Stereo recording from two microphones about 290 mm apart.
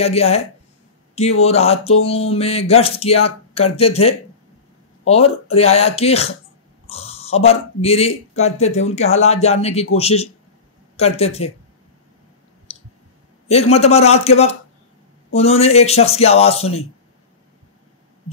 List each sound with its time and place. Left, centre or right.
0.0 s speech: left
12.7 s clicking: left
13.5 s speech: left